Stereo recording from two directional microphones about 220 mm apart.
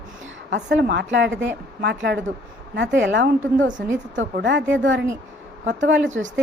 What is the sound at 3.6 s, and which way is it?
Speech, 35° right (ahead or behind).